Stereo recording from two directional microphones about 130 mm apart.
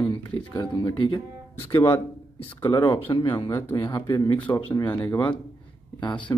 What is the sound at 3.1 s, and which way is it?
Speech, 30° left (ahead or behind).